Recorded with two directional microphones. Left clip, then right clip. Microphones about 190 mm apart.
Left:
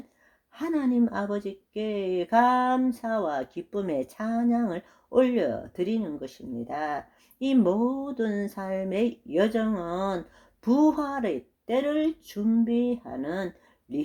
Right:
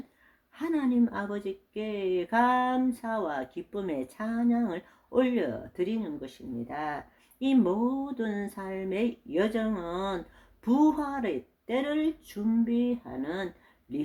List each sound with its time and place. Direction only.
0.6 s speech: 35° left (ahead or behind)